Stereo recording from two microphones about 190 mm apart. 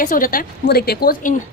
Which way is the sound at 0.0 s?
45° left (ahead or behind).